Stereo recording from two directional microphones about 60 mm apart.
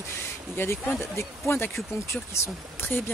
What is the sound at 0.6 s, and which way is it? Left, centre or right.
Speech, left.